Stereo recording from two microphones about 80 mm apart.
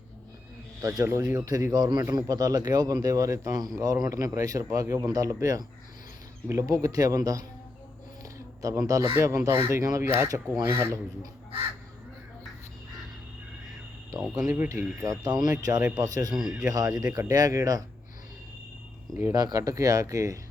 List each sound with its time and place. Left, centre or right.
0.8 s a man's voice: right
2.0 s speech: right
8.2 s a sound: right
9.1 s speech: right
14.1 s speech: right
16.3 s speech: centre
16.6 s speech: right
19.1 s speech: right